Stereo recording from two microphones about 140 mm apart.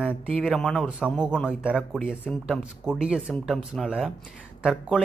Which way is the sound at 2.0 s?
10° left (ahead or behind).